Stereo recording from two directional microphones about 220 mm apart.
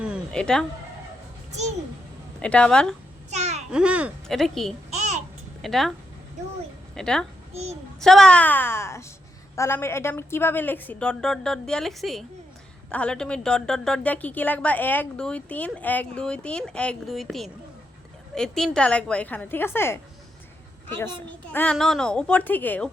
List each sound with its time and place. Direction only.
0.0 s a sound: centre (ahead or behind)
2.4 s a woman's voice: 5° left (ahead or behind)
3.2 s babbling: 30° right (ahead or behind)
3.7 s a woman's voice: 5° right (ahead or behind)
6.9 s a woman's voice: 5° left (ahead or behind)
7.5 s a child's voice: 30° right (ahead or behind)
8.0 s a woman's voice: centre (ahead or behind)
21.5 s a woman's voice: 5° left (ahead or behind)